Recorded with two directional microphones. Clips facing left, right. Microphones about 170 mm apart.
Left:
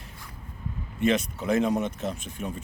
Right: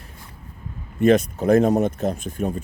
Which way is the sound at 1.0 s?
45° right (ahead or behind).